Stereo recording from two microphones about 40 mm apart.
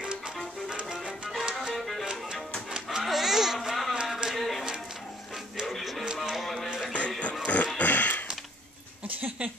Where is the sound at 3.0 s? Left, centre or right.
Centre.